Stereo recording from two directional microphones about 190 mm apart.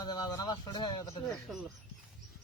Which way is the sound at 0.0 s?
20° left (ahead or behind).